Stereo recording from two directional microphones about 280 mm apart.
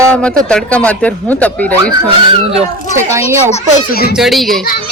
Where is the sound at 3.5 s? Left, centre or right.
Left.